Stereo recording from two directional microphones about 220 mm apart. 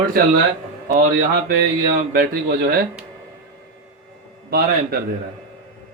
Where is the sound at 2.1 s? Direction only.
45° right (ahead or behind).